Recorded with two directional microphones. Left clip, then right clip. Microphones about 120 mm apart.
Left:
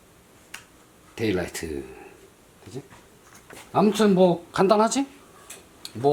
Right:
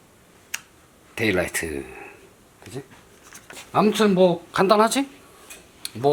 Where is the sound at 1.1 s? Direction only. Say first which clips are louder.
Right 4 dB; 30° right (ahead or behind).